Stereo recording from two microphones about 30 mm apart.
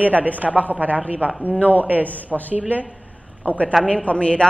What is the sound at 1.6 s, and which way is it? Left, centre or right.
Speech, right.